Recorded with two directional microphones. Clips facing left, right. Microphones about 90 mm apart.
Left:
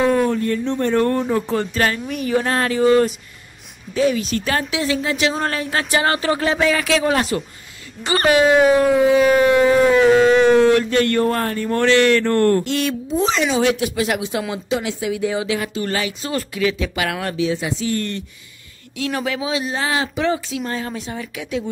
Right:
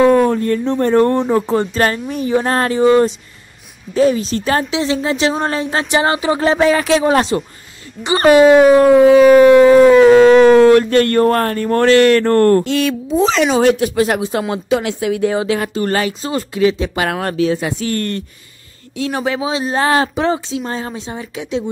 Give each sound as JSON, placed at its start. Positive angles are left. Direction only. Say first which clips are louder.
{"t": 0.0, "sound": "a woman's voice", "louder": "right 6 dB", "side_deg": -45}
{"t": 6.4, "sound": "a woman's voice", "louder": "right 5 dB", "side_deg": -30}
{"t": 8.9, "sound": "howl", "louder": "right 7 dB", "side_deg": -75}
{"t": 10.3, "sound": "speech", "louder": "right 6 dB", "side_deg": -50}
{"t": 14.5, "sound": "speech", "louder": "right 5 dB", "side_deg": -55}
{"t": 16.3, "sound": "speech", "louder": "right 6 dB", "side_deg": -30}
{"t": 18.9, "sound": "a woman's voice", "louder": "right 4 dB", "side_deg": -30}
{"t": 19.7, "sound": "speech", "louder": "right 7 dB", "side_deg": -45}
{"t": 20.3, "sound": "speech", "louder": "right 3 dB", "side_deg": -25}